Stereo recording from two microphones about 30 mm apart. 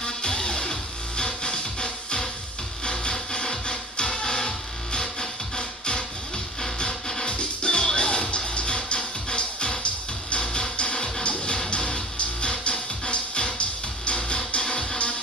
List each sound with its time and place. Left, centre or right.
0.0 s music: left
7.2 s music: left
14.6 s music: left